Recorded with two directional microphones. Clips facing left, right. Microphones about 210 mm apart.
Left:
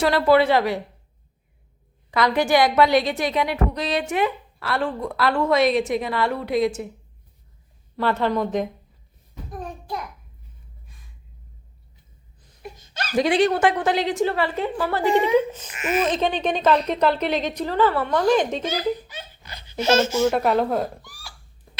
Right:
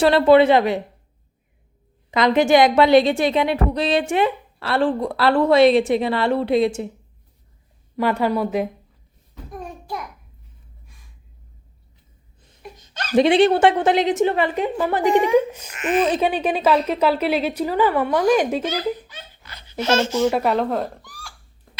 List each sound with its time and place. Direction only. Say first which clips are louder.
0.0 s a woman's voice: right 4 dB; 25° right (ahead or behind)
2.0 s a woman's voice: right 4 dB; 20° right (ahead or behind)
7.9 s a woman's voice: right 2 dB; 15° right (ahead or behind)
9.3 s a sound: even; centre (ahead or behind)
13.1 s a woman's voice: right 4 dB; 25° right (ahead or behind)
15.1 s speech: right 2 dB; 15° left (ahead or behind)
15.4 s a woman's voice: right 2 dB; 10° right (ahead or behind)
15.7 s speech: right 4 dB; 5° left (ahead or behind)
16.0 s a woman's voice: right 2 dB; 10° right (ahead or behind)
18.7 s a sound: even; 15° left (ahead or behind)
19.8 s speech: even; 10° left (ahead or behind)